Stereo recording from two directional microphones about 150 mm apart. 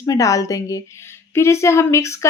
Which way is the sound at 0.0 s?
20° left (ahead or behind).